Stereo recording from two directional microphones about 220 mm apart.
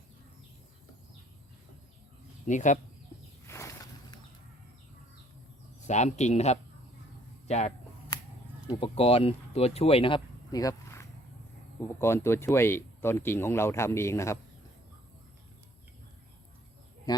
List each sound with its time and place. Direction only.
2.5 s speech: 35° left (ahead or behind)
3.4 s a sound: 10° left (ahead or behind)
5.9 s speech: 30° left (ahead or behind)
8.1 s a sound: 15° left (ahead or behind)
8.7 s speech: 25° left (ahead or behind)
17.1 s speech: 20° left (ahead or behind)